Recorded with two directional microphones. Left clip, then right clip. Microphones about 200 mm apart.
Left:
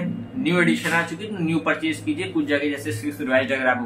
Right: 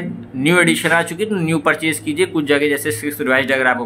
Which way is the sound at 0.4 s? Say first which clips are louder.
Right 7 dB; 60° right (ahead or behind).